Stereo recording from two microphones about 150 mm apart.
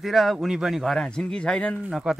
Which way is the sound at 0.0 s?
Centre (ahead or behind).